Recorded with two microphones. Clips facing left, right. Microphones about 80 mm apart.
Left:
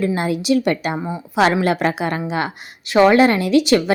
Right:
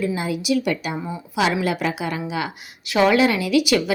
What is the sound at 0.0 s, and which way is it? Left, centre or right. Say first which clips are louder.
A woman's voice: left 4 dB; left.